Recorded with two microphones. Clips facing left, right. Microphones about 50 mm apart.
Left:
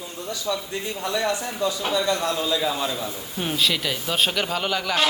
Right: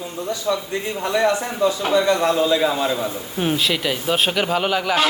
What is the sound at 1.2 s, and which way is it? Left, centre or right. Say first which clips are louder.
A man's voice: right 7 dB; right.